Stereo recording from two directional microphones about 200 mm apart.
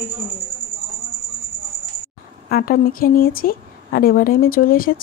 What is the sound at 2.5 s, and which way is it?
A woman's voice, 45° left (ahead or behind).